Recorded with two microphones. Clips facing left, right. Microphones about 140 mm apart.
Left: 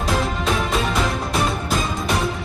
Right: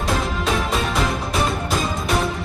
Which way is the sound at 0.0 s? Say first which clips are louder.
Even; centre (ahead or behind).